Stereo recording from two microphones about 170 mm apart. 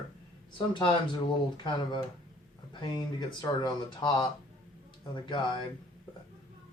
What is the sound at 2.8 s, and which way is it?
Speech, 25° left (ahead or behind).